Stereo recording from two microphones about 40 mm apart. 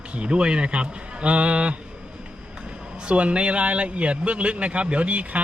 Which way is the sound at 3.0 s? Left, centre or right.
Right.